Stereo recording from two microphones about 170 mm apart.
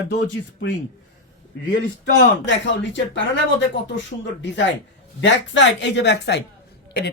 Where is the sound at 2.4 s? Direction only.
90° left.